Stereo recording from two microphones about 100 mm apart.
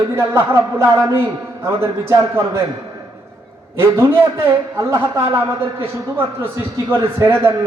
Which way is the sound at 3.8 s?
25° right (ahead or behind).